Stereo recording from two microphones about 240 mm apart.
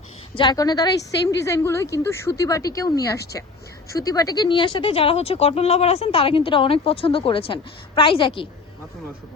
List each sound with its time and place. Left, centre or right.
0.3 s a woman's voice: centre